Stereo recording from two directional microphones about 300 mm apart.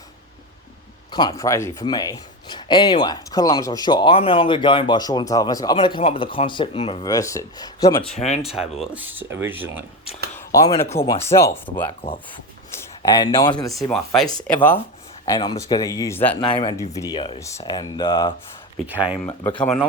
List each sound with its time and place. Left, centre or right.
1.1 s speech: centre
8.5 s speech: centre
10.3 s speech: centre
11.9 s speech: centre
13.7 s speech: centre
18.9 s speech: centre
19.4 s speech: centre